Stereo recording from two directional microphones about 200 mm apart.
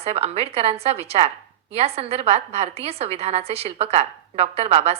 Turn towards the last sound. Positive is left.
turn(degrees=-30)  # may be behind; listen again after turning